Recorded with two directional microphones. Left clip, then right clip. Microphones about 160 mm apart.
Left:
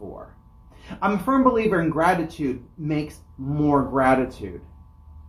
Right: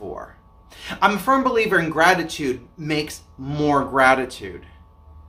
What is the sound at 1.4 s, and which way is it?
Speech, 15° right (ahead or behind).